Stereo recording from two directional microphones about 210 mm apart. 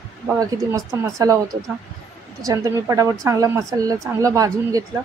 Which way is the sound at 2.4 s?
15° right (ahead or behind).